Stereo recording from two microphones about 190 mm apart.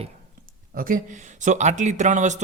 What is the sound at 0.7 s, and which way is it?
Speech, 45° right (ahead or behind).